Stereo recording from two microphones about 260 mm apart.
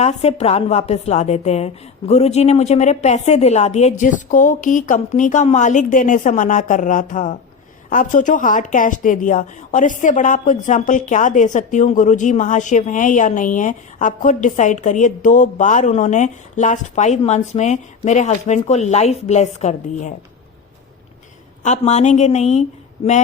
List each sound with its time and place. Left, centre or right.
0.0 s a woman's voice: left
21.6 s a woman's voice: left